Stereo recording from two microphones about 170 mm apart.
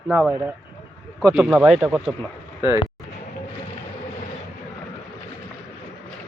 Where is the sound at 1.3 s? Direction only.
5° right (ahead or behind).